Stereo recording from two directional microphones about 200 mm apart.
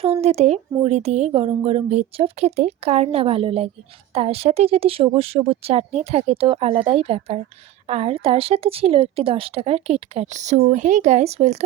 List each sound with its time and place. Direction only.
0.0 s a woman's voice: 30° right (ahead or behind)